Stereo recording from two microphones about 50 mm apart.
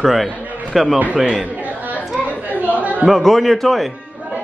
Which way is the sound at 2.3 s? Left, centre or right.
Right.